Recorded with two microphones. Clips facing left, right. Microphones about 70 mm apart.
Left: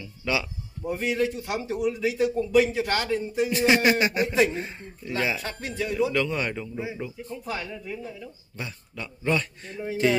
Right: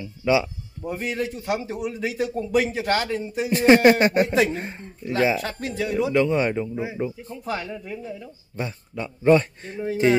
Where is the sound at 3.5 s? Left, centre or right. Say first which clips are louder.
Right 7 dB; right.